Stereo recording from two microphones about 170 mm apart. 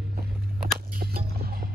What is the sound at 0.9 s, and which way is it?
Music, 60° right (ahead or behind).